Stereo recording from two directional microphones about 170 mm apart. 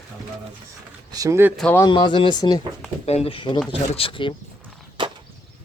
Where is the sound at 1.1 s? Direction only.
20° right (ahead or behind).